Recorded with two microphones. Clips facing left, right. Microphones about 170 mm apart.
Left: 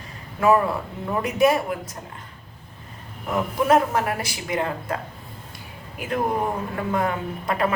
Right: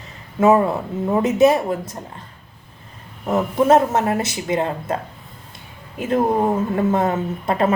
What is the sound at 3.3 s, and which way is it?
Speech, 25° right (ahead or behind).